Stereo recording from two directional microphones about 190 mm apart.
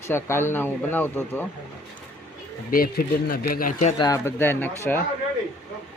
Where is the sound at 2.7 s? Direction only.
50° left (ahead or behind).